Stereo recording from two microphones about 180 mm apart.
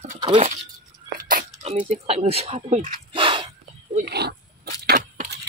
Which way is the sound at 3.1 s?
25° right (ahead or behind).